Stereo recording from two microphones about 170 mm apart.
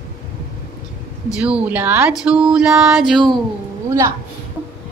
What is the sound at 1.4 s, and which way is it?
Female singing, 10° right (ahead or behind).